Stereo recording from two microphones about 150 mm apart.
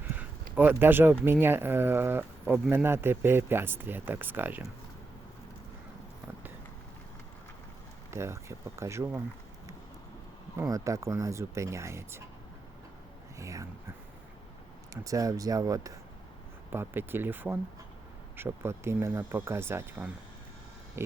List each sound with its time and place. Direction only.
0.0 s speech: 10° right (ahead or behind)
8.1 s speech: 20° right (ahead or behind)
10.6 s speech: 20° right (ahead or behind)
13.4 s speech: 20° right (ahead or behind)
15.0 s speech: 20° right (ahead or behind)